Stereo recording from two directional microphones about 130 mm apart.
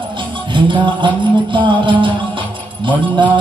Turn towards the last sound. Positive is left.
turn(degrees=-40)  # may be behind; listen again after turning